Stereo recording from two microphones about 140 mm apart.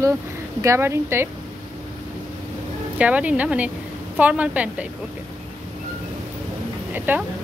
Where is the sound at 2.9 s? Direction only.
10° right (ahead or behind).